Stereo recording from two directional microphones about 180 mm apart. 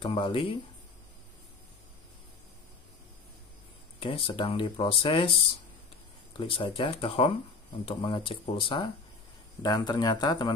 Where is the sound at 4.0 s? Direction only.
30° left (ahead or behind).